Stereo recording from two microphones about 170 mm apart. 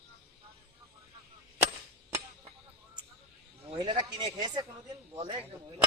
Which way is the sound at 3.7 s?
25° right (ahead or behind).